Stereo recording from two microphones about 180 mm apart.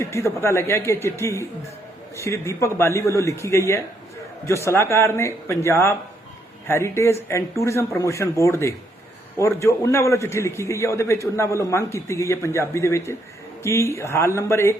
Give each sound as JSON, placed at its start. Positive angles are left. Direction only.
{"t": 0.0, "sound": "a man's voice", "side_deg": 15}